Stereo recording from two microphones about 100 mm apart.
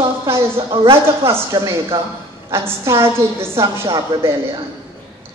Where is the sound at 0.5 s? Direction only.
65° right (ahead or behind).